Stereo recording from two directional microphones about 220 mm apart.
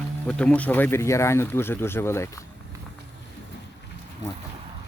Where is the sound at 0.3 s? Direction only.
5° left (ahead or behind).